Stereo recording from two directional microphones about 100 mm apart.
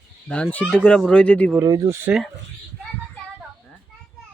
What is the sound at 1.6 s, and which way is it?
Speech, 35° right (ahead or behind).